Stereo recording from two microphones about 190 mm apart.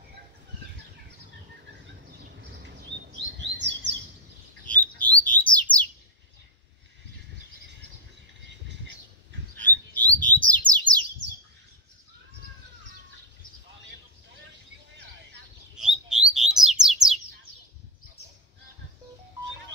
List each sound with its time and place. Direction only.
3.3 s chirp: 70° right (ahead or behind)
4.6 s bird: 10° left (ahead or behind)
9.6 s bird: 10° left (ahead or behind)
15.7 s bird: 5° right (ahead or behind)